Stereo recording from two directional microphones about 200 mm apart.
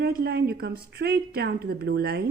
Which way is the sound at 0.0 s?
50° right (ahead or behind).